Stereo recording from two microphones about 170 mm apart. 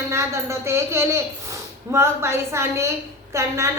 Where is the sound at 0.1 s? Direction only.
15° right (ahead or behind).